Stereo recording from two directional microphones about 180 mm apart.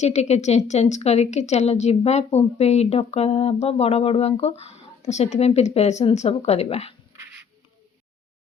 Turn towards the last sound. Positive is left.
turn(degrees=35)  # may be behind; listen again after turning